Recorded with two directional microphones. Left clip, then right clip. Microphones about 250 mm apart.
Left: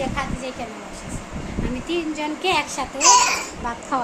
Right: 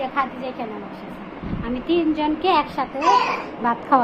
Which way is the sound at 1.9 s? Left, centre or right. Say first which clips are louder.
Right 6 dB; centre.